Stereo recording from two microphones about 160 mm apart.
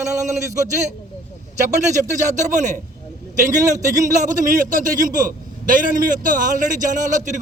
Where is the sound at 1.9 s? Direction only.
50° right (ahead or behind).